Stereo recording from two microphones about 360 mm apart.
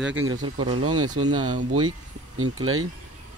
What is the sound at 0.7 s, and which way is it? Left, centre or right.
Speech, right.